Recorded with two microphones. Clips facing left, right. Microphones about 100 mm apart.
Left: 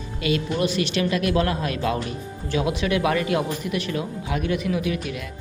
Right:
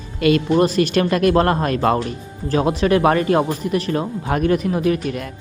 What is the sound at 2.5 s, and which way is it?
Speech, 40° right (ahead or behind).